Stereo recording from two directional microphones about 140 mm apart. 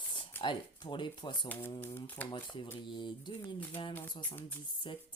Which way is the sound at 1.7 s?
15° left (ahead or behind).